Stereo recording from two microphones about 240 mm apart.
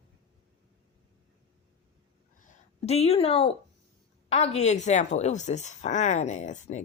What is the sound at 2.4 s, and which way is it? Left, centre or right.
Speech, left.